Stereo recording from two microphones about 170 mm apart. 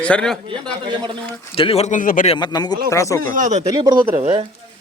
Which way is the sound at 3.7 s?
25° right (ahead or behind).